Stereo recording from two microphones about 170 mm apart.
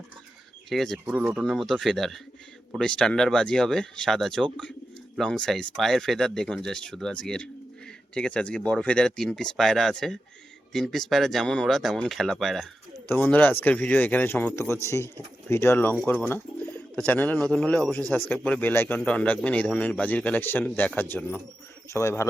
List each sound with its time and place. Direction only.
0.7 s a man's voice: centre (ahead or behind); by 22.3 s 15° left (ahead or behind)